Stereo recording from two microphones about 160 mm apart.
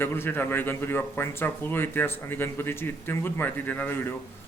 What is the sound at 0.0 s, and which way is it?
A man's voice, 15° left (ahead or behind).